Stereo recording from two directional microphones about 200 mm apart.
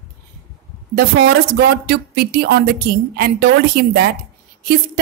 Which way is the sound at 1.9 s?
50° right (ahead or behind).